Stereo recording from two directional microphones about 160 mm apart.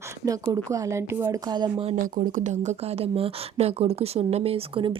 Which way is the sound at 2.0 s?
55° right (ahead or behind).